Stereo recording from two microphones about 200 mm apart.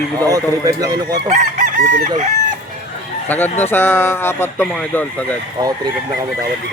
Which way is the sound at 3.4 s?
35° left (ahead or behind).